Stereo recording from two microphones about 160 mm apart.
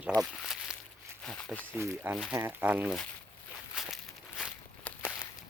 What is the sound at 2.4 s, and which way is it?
Speech, 15° right (ahead or behind).